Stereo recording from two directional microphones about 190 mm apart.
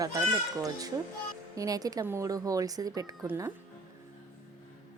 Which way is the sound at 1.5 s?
20° right (ahead or behind).